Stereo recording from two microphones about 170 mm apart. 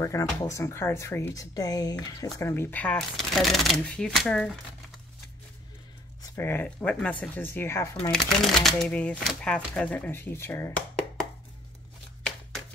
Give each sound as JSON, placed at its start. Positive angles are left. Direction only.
{"t": 0.0, "sound": "speech", "side_deg": 20}
{"t": 6.3, "sound": "speech", "side_deg": 10}
{"t": 8.1, "sound": "speech", "side_deg": 0}